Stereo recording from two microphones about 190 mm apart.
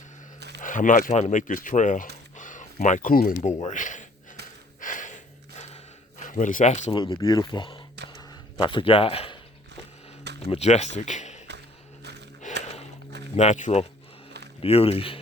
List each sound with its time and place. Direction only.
0.3 s a sound: 60° right (ahead or behind)
0.6 s speech: 45° left (ahead or behind)
4.8 s gasp: 45° left (ahead or behind)
6.2 s speech: 40° left (ahead or behind)
6.9 s a man's voice: 25° left (ahead or behind)
10.5 s speech: 35° left (ahead or behind)
12.4 s a sound: 40° left (ahead or behind)
13.3 s speech: 35° left (ahead or behind)